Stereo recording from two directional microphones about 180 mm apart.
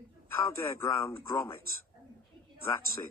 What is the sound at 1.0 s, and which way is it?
Speech, 15° left (ahead or behind).